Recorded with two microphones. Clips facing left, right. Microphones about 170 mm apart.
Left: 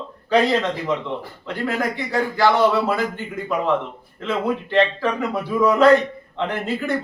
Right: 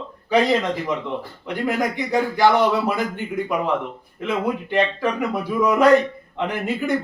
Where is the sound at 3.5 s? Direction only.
15° right (ahead or behind).